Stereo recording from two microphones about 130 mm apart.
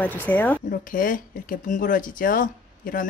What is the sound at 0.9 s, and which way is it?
Speech, 90° left.